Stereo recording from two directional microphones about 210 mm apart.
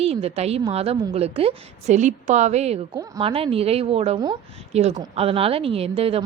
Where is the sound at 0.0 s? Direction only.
30° right (ahead or behind).